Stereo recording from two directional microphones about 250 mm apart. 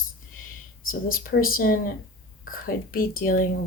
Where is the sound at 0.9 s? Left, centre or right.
Left.